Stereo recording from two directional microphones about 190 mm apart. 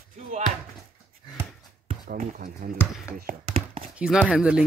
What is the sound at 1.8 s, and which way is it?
Speech, 50° right (ahead or behind).